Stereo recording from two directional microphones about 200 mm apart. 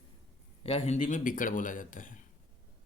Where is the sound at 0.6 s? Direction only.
30° left (ahead or behind).